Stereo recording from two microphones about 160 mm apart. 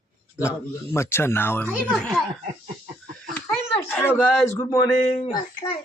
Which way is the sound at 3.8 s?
10° left (ahead or behind).